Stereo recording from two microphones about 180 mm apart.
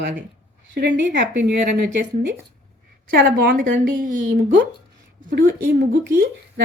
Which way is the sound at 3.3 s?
55° right (ahead or behind).